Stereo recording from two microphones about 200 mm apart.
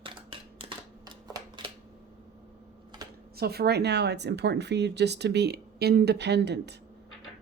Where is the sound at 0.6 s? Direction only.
25° right (ahead or behind).